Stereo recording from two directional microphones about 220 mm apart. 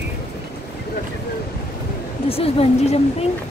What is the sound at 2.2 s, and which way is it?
Speech, 25° left (ahead or behind).